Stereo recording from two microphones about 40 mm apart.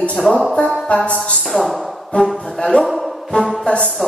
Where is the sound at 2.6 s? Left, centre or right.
Left.